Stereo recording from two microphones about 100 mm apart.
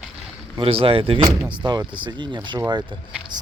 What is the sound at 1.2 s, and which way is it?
Speech, 40° right (ahead or behind).